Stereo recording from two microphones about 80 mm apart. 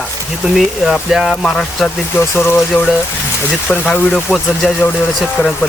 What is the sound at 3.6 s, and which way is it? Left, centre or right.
Speech, centre.